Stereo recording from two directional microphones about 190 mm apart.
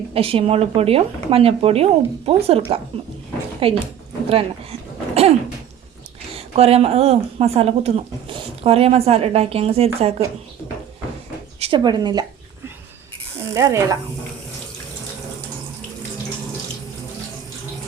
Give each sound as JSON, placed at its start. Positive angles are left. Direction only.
{"t": 0.1, "sound": "speech", "side_deg": -30}
{"t": 4.3, "sound": "a sound", "side_deg": -30}
{"t": 6.3, "sound": "speech", "side_deg": -30}
{"t": 11.6, "sound": "speech", "side_deg": -25}
{"t": 13.5, "sound": "speech", "side_deg": -15}